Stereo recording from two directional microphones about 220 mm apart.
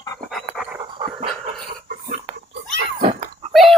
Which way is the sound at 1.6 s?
40° right (ahead or behind).